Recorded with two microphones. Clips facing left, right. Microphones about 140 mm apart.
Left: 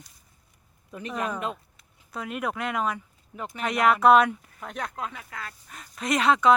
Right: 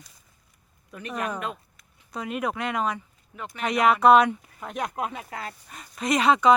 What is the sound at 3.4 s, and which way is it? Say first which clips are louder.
Speech: left 2 dB; 30° left (ahead or behind).